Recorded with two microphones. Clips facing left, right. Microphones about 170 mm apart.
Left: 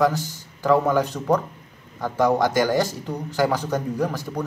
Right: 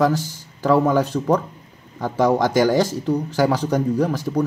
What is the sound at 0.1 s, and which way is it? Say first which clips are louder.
Speech: right 6 dB; 10° right (ahead or behind).